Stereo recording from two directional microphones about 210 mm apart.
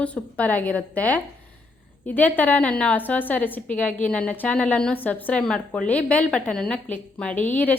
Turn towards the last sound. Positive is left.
turn(degrees=10)  # may be behind; listen again after turning